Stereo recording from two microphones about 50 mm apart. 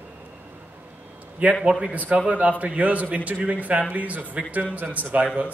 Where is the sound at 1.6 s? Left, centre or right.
Centre.